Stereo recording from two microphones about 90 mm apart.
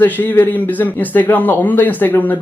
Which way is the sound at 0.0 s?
20° left (ahead or behind).